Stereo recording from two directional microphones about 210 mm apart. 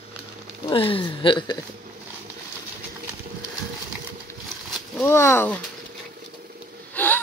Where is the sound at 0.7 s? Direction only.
25° left (ahead or behind).